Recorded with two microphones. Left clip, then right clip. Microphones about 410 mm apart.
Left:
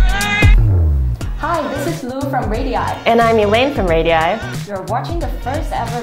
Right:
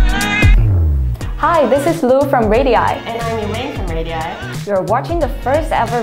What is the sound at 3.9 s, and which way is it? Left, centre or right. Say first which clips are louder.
Speech: left 12 dB; left.